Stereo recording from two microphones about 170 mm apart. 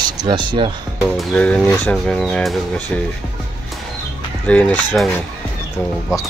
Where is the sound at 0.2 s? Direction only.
30° right (ahead or behind).